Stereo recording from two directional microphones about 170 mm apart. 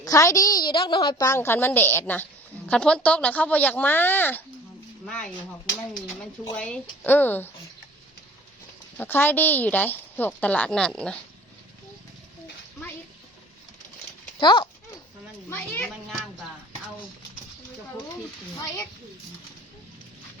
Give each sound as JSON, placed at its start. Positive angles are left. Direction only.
{"t": 0.0, "sound": "a woman's voice", "side_deg": 20}
{"t": 6.6, "sound": "a woman's voice", "side_deg": 10}
{"t": 9.0, "sound": "a woman's voice", "side_deg": 10}
{"t": 14.3, "sound": "speech", "side_deg": 30}
{"t": 15.4, "sound": "a woman's voice", "side_deg": 15}